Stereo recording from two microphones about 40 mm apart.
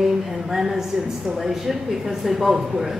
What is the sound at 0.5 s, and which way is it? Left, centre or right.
Speech, centre.